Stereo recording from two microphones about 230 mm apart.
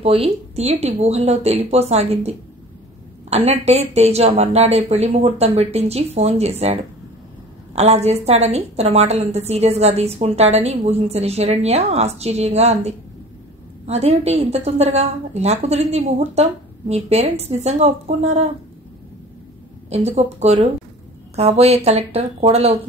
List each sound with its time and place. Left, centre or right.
0.0 s a woman's voice: right
19.9 s a woman's voice: right